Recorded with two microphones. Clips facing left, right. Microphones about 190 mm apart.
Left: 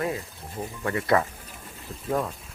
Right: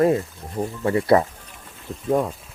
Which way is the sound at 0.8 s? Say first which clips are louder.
Right 6 dB; 30° right (ahead or behind).